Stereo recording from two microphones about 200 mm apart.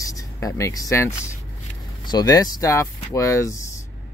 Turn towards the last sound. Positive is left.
turn(degrees=15)  # may be behind; listen again after turning